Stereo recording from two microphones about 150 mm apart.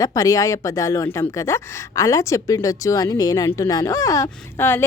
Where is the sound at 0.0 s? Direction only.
25° left (ahead or behind).